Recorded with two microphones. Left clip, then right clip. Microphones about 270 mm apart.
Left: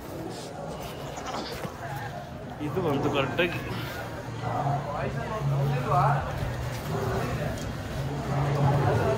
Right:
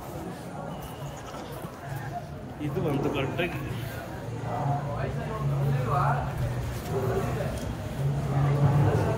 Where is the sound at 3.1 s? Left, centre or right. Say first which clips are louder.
Left 4 dB; centre.